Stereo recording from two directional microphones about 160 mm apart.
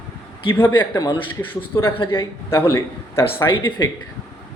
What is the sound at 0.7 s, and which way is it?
A man's voice, 25° left (ahead or behind).